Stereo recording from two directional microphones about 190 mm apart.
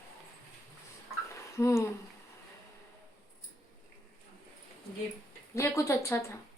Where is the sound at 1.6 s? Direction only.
15° left (ahead or behind).